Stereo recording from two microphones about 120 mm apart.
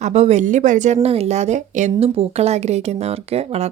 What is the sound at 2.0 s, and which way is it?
A woman's voice, 55° right (ahead or behind).